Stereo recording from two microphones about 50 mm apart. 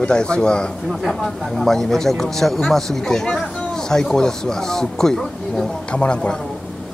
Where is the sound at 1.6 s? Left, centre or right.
Centre.